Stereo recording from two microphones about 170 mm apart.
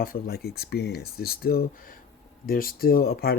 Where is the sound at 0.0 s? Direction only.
60° left (ahead or behind).